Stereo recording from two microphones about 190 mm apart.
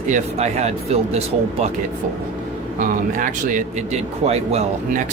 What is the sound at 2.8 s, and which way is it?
Speech, 45° right (ahead or behind).